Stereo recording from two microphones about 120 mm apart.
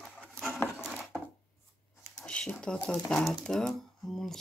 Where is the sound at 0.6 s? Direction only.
20° left (ahead or behind).